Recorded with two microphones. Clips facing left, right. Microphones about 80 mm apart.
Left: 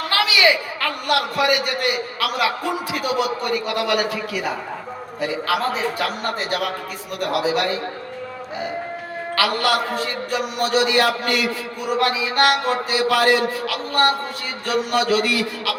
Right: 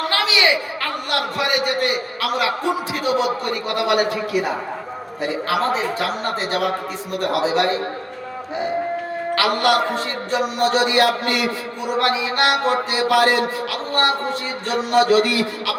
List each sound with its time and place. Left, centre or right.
0.1 s a man's voice: right
5.5 s a man's voice: right
9.3 s a man's voice: right